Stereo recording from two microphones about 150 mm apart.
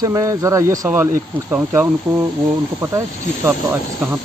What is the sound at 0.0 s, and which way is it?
Speech, 20° right (ahead or behind).